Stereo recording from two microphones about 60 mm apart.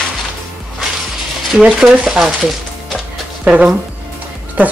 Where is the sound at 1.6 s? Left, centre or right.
Centre.